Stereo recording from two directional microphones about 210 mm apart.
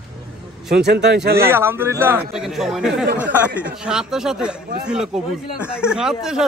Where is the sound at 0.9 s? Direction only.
55° right (ahead or behind).